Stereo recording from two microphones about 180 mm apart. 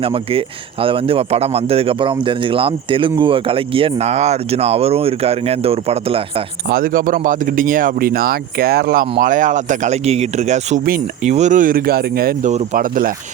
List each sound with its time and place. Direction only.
0.0 s speech: 30° right (ahead or behind)
6.7 s speech: 55° right (ahead or behind)